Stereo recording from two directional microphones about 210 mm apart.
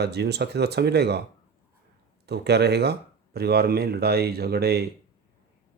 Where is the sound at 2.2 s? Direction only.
50° right (ahead or behind).